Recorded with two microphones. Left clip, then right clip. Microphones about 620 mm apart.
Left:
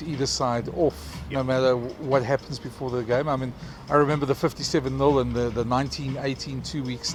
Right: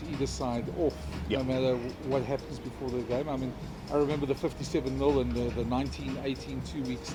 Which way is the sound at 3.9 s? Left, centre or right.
Left.